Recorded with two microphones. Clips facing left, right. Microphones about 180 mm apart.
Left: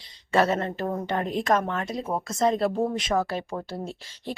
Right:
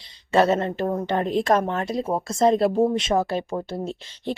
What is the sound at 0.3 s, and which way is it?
A woman's voice, 25° right (ahead or behind).